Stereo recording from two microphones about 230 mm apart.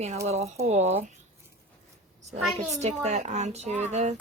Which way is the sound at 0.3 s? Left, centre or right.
Right.